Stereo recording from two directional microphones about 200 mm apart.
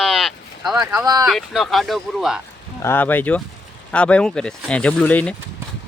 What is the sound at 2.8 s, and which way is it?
Speech, 10° left (ahead or behind).